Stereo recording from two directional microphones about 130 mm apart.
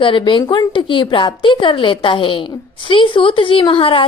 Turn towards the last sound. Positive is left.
turn(degrees=45)  # may be behind; listen again after turning